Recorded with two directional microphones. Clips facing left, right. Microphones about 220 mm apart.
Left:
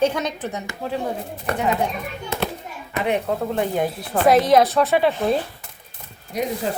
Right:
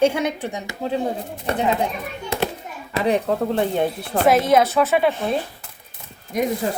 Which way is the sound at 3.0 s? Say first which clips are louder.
Right 3 dB; 35° right (ahead or behind).